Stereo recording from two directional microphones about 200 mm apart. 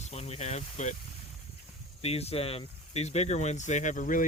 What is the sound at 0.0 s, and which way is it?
Speech, 35° left (ahead or behind).